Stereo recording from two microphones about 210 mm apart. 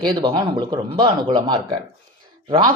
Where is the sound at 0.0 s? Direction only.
20° right (ahead or behind).